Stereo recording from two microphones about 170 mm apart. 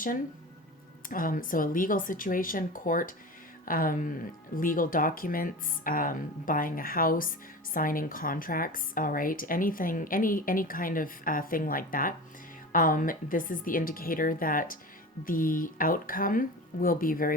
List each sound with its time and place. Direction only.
1.0 s a woman's voice: 55° left (ahead or behind)